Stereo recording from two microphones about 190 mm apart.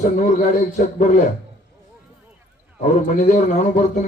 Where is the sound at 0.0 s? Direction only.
40° left (ahead or behind).